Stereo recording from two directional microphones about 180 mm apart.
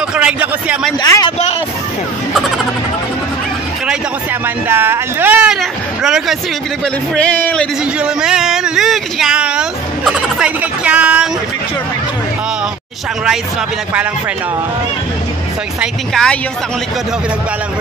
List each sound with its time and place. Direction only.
0.1 s speech: 5° right (ahead or behind)
1.0 s speech: 20° left (ahead or behind)
4.6 s speech: 10° right (ahead or behind); by 7.6 s 5° left (ahead or behind)
8.0 s speech: 5° right (ahead or behind)
15.8 s speech: 5° left (ahead or behind)